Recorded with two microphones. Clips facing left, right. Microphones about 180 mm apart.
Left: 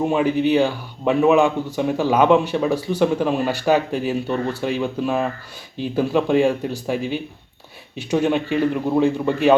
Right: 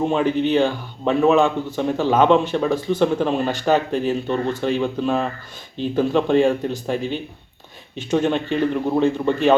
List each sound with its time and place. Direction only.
0.0 s a man's voice: 10° left (ahead or behind)